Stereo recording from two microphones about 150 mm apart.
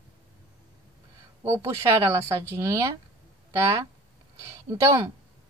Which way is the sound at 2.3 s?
20° right (ahead or behind).